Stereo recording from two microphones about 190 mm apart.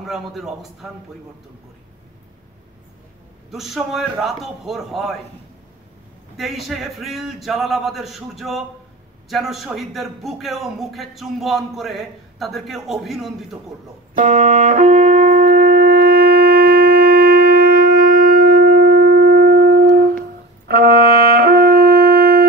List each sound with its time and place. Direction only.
0.0 s a man's voice: centre (ahead or behind)
3.4 s a man's voice: centre (ahead or behind)
6.3 s a man's voice: centre (ahead or behind)
14.1 s wind instrument: 40° right (ahead or behind)